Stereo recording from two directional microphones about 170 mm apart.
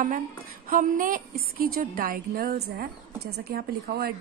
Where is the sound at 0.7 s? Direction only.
50° right (ahead or behind).